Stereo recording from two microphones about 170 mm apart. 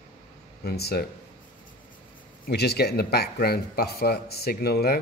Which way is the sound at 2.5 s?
75° left (ahead or behind).